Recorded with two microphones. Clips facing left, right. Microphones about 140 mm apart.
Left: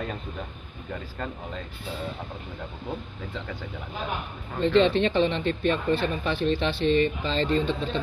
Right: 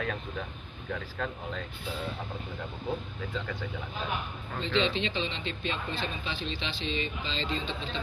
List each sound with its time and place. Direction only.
0.9 s speech: 5° left (ahead or behind)
4.6 s speech: 55° left (ahead or behind)